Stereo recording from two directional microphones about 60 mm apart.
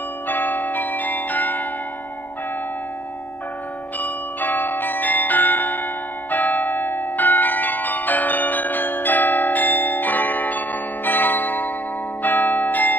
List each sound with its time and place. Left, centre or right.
0.3 s change ringing: left
4.0 s change ringing: left